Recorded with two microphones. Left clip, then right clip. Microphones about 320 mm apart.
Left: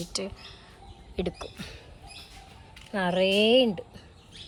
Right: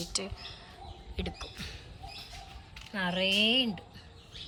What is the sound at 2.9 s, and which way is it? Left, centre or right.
Speech, centre.